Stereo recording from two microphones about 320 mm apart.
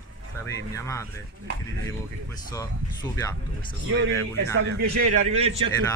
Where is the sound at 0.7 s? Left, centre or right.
Centre.